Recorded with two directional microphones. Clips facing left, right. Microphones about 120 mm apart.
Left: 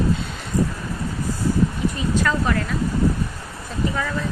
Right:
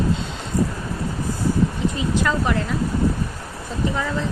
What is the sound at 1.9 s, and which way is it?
Speech, 20° right (ahead or behind).